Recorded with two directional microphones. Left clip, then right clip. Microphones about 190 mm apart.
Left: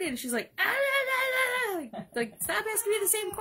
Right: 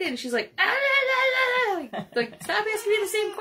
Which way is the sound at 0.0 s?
65° left (ahead or behind).